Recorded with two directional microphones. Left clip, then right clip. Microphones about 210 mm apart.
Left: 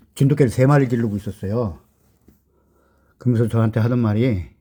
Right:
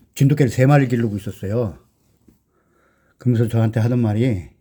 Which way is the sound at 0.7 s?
5° right (ahead or behind).